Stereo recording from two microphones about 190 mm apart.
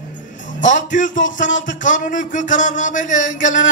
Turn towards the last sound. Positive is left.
turn(degrees=40)  # may be behind; listen again after turning